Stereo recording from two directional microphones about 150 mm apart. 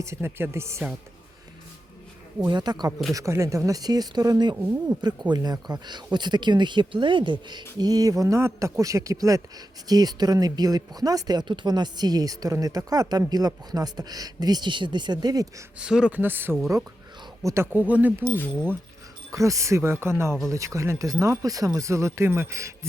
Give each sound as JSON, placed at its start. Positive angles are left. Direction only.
{"t": 0.0, "sound": "speech", "side_deg": -15}
{"t": 2.4, "sound": "speech", "side_deg": -30}
{"t": 4.5, "sound": "speech", "side_deg": -15}
{"t": 4.9, "sound": "speech", "side_deg": -30}
{"t": 15.8, "sound": "speech", "side_deg": -5}
{"t": 18.3, "sound": "speech", "side_deg": 5}
{"t": 19.3, "sound": "speech", "side_deg": -20}